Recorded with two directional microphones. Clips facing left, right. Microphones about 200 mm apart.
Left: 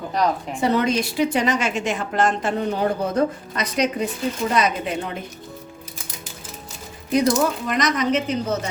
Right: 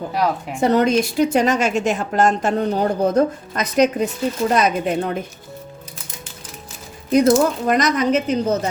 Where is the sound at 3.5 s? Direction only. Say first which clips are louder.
Right 6 dB; 45° right (ahead or behind).